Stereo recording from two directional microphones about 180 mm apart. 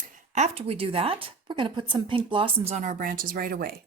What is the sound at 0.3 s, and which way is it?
Speech, 35° right (ahead or behind).